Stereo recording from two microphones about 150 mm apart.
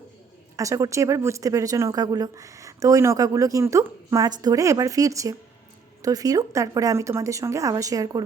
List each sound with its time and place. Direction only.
0.5 s speech: 20° right (ahead or behind)